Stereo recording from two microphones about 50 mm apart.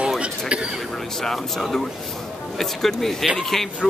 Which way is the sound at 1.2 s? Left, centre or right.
Centre.